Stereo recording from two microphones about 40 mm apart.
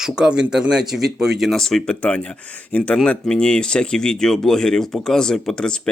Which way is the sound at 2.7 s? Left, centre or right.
Left.